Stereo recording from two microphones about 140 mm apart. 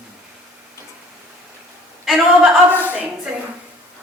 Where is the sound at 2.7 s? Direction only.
15° left (ahead or behind).